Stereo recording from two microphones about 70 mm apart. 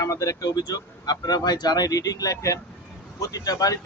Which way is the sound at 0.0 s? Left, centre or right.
Left.